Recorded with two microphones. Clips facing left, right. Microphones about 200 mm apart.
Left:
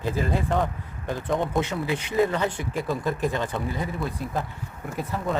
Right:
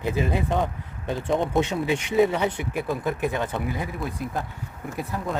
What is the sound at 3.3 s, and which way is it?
Speech, 10° right (ahead or behind).